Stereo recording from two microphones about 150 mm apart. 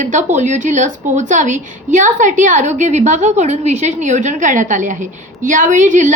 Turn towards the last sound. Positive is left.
turn(degrees=-55)  # may be behind; listen again after turning